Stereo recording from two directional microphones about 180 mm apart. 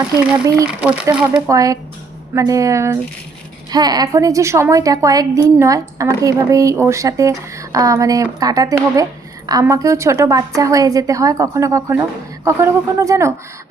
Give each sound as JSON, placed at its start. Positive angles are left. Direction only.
{"t": 0.2, "sound": "a woman's voice", "side_deg": -15}
{"t": 1.5, "sound": "a woman's voice", "side_deg": -20}